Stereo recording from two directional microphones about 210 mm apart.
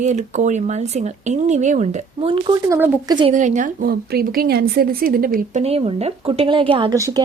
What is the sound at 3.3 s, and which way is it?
A woman's voice, 35° right (ahead or behind).